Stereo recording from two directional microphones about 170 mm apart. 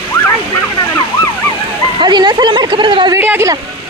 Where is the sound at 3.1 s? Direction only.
15° right (ahead or behind).